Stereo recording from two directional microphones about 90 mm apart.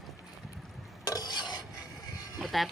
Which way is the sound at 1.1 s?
50° left (ahead or behind).